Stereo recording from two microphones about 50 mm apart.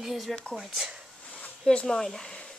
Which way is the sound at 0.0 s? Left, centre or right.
Centre.